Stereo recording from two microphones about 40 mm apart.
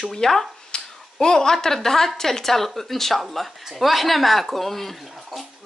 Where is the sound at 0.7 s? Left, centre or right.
Left.